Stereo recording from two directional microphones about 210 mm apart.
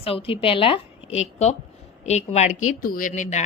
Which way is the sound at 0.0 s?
25° left (ahead or behind).